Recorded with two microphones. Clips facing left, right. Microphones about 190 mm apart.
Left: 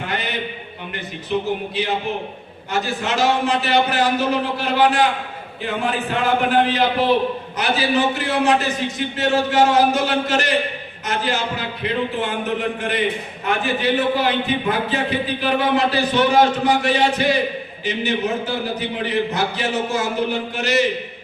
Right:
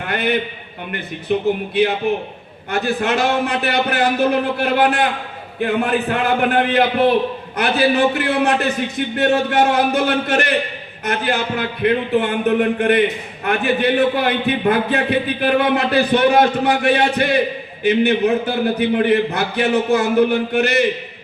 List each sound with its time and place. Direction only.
0.1 s a man's voice: 55° right (ahead or behind)